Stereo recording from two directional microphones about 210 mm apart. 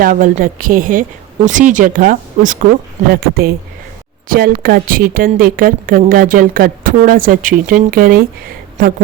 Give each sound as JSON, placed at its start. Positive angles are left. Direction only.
{"t": 0.0, "sound": "a woman's voice", "side_deg": -40}